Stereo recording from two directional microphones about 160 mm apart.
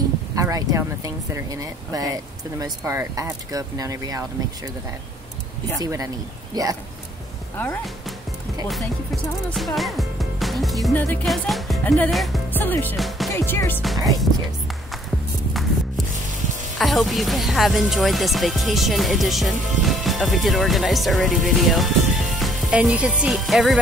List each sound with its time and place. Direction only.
0.4 s speech: 20° right (ahead or behind)
5.8 s speech: 20° right (ahead or behind)
7.5 s music: 10° left (ahead or behind)
8.6 s speech: centre (ahead or behind)
9.8 s music: centre (ahead or behind)
12.1 s speech: centre (ahead or behind)
12.4 s music: 10° left (ahead or behind)
12.9 s music: centre (ahead or behind)
13.3 s music: 15° left (ahead or behind)
13.9 s speech: 20° right (ahead or behind)
16.7 s speech: centre (ahead or behind)